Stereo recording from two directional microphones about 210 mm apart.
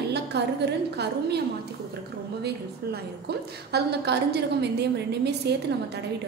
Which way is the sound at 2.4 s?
50° right (ahead or behind).